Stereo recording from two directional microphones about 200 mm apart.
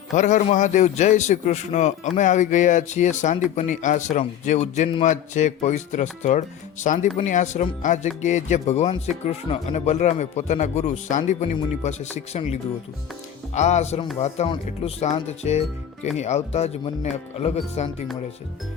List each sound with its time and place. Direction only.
0.2 s a man's voice: 40° left (ahead or behind)